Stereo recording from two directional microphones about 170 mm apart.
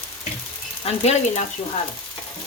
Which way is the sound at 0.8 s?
40° left (ahead or behind).